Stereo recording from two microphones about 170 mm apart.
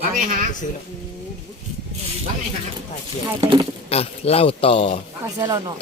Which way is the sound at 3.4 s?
30° right (ahead or behind).